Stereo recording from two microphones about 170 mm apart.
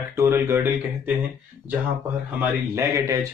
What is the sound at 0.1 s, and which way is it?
Speech, 15° right (ahead or behind).